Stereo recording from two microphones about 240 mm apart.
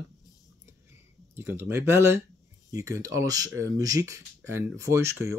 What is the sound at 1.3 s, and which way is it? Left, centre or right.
Speech, centre.